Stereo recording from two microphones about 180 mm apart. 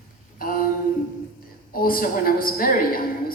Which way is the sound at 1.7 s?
55° left (ahead or behind).